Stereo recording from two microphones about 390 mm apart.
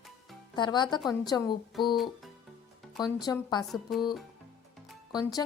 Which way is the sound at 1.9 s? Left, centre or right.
Centre.